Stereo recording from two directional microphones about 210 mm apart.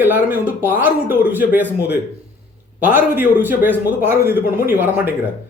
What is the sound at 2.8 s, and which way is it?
Speech, 10° right (ahead or behind).